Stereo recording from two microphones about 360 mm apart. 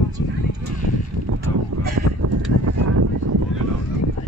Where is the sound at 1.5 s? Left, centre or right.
Right.